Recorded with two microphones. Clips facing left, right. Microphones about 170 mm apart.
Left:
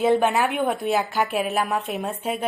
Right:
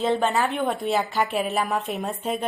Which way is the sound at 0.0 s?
10° left (ahead or behind).